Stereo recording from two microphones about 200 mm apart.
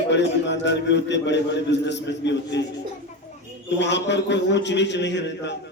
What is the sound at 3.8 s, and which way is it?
A man's voice, 60° left (ahead or behind).